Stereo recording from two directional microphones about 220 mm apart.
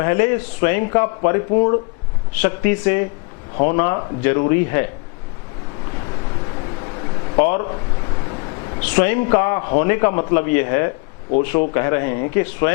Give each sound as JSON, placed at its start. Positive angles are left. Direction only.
{"t": 0.0, "sound": "a man's voice", "side_deg": 15}
{"t": 7.3, "sound": "a sound", "side_deg": 15}
{"t": 8.8, "sound": "a man's voice", "side_deg": 10}